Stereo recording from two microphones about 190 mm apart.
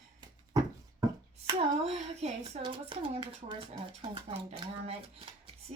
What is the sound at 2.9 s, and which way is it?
A woman's voice, 25° right (ahead or behind).